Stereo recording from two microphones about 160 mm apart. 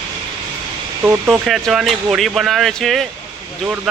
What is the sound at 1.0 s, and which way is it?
Speech, 15° right (ahead or behind).